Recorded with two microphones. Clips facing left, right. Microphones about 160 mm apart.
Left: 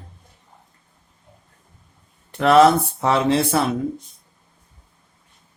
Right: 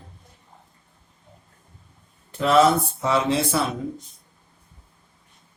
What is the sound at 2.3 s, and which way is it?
Speech, 70° left (ahead or behind).